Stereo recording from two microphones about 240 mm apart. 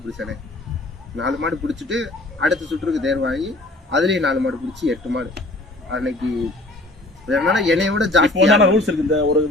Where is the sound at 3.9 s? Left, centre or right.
Right.